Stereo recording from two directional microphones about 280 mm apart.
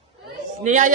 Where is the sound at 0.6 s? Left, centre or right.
Right.